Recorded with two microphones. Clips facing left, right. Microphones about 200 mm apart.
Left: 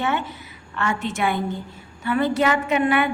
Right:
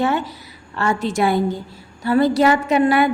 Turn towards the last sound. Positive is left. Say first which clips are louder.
# right 4 dB
turn(degrees=-35)  # may be behind; listen again after turning